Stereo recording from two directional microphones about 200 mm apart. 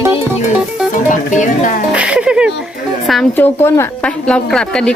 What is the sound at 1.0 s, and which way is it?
Music, 40° left (ahead or behind).